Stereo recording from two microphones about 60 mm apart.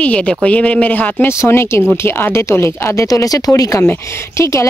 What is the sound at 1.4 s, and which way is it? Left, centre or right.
Speech, left.